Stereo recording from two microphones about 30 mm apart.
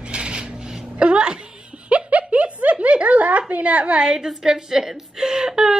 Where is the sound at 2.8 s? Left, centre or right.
Right.